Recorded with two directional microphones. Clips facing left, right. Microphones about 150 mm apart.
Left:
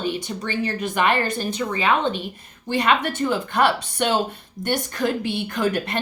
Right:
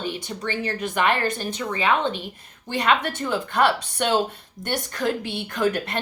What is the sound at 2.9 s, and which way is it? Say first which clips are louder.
A woman's voice: left 1 dB; 10° left (ahead or behind).